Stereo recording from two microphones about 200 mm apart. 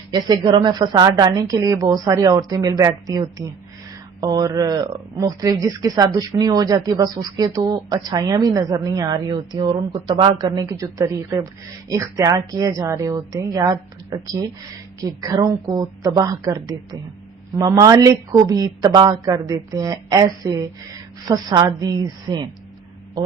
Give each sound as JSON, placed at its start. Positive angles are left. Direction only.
{"t": 0.1, "sound": "speech", "side_deg": -20}